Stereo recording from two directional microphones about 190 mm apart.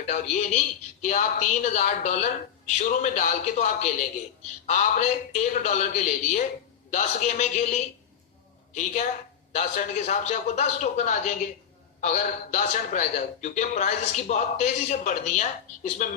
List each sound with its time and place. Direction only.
0.0 s a man's voice: 40° left (ahead or behind)